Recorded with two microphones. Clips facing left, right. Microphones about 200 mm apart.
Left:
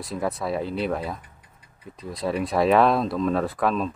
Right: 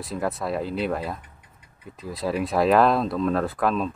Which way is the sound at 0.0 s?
Centre (ahead or behind).